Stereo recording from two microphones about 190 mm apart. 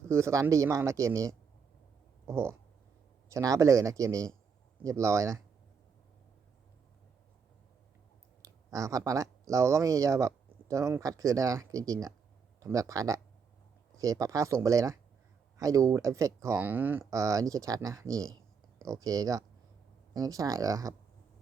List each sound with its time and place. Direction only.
0.1 s speech: 15° right (ahead or behind)
8.4 s speech: 15° right (ahead or behind)